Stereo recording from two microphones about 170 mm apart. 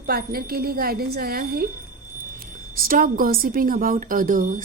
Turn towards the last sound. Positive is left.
turn(degrees=-50)  # may be behind; listen again after turning